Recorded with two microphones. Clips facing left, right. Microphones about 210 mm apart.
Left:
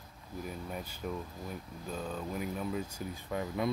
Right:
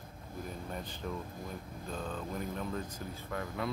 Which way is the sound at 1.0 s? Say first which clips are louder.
Left 2 dB; 10° left (ahead or behind).